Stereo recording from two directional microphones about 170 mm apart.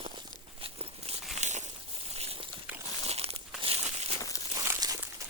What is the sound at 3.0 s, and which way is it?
Crumpling, 35° right (ahead or behind).